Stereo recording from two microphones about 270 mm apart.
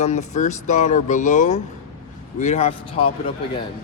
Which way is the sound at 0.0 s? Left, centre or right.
Left.